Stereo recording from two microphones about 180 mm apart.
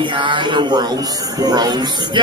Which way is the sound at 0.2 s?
25° right (ahead or behind).